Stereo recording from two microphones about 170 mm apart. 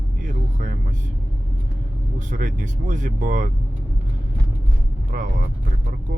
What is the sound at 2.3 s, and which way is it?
Speech, 50° right (ahead or behind).